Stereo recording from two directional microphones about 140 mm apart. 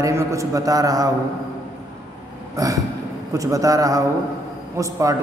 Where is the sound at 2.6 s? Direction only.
25° right (ahead or behind).